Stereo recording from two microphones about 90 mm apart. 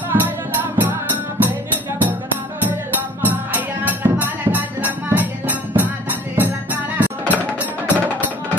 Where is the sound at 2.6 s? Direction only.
20° right (ahead or behind).